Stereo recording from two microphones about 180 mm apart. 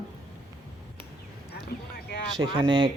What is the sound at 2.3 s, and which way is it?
Speech, 25° right (ahead or behind).